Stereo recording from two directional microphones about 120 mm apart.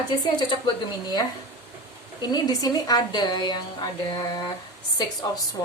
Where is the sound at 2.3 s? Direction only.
30° left (ahead or behind).